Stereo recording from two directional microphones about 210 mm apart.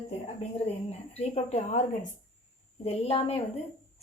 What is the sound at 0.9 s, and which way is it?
A woman's voice, 30° left (ahead or behind).